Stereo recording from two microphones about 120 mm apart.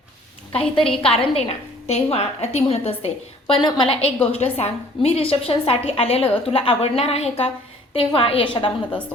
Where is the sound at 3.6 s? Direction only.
40° left (ahead or behind).